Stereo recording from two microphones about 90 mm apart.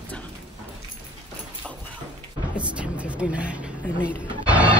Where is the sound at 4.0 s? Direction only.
15° right (ahead or behind).